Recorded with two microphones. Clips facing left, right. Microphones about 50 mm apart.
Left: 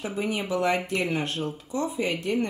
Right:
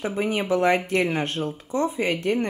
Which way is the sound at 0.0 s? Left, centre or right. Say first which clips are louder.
Right 4 dB; right.